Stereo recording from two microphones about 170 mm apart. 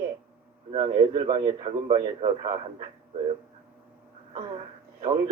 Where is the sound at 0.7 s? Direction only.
30° right (ahead or behind).